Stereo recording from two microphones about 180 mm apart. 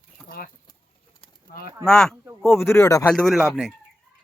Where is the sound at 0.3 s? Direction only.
55° left (ahead or behind).